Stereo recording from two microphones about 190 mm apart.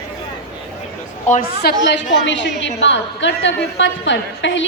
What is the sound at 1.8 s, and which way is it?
A woman's voice, 70° left (ahead or behind).